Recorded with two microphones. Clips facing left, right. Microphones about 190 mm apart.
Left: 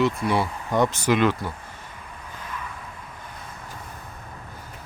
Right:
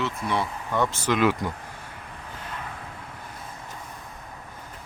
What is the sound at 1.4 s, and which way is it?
Speech, 15° right (ahead or behind).